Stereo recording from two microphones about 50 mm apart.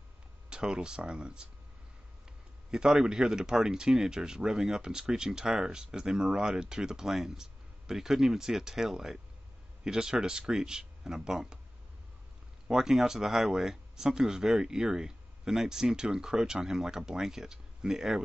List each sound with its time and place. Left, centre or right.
0.5 s speech: centre
2.7 s speech: centre
12.7 s speech: centre